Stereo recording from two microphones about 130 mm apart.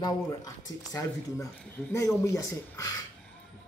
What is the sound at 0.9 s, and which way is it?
Speech, 25° left (ahead or behind).